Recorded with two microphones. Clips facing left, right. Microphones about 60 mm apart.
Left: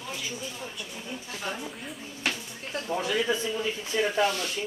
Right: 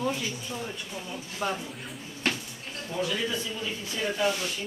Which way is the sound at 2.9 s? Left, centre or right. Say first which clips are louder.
Left 2 dB; left.